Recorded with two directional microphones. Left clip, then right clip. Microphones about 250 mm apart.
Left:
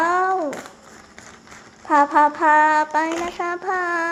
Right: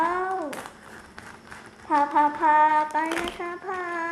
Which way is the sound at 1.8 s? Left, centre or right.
Left.